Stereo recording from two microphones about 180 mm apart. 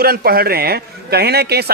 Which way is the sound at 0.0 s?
55° right (ahead or behind).